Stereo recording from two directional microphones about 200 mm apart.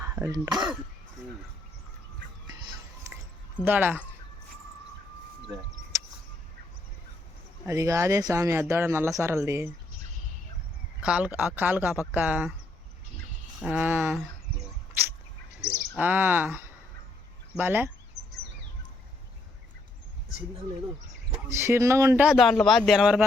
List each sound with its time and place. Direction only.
0.0 s speech: 15° right (ahead or behind)
2.5 s a sound: 20° right (ahead or behind)
3.6 s speech: 10° right (ahead or behind)
5.9 s a sound: 15° right (ahead or behind)
7.7 s speech: 15° right (ahead or behind)
11.0 s speech: 5° right (ahead or behind)
13.7 s speech: 10° right (ahead or behind)
16.0 s speech: 10° right (ahead or behind)
21.5 s speech: 15° right (ahead or behind)